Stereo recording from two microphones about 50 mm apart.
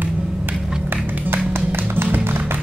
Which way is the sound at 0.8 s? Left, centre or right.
Right.